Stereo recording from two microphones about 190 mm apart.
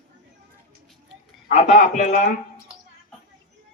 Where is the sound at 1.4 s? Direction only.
40° left (ahead or behind).